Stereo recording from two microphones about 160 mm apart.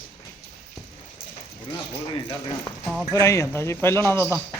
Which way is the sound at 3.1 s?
20° left (ahead or behind).